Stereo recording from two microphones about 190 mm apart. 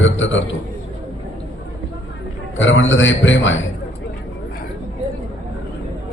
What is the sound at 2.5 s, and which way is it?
A man's voice, 75° left (ahead or behind).